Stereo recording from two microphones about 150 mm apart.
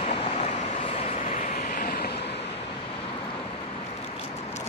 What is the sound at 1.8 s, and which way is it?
Vehicle, 90° left.